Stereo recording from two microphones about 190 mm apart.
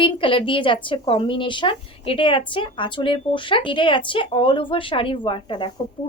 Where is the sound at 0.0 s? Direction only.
25° left (ahead or behind).